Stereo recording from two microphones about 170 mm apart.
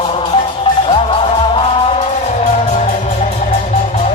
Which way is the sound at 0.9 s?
30° left (ahead or behind).